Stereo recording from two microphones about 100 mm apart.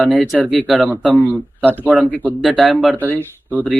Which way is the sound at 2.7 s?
15° right (ahead or behind).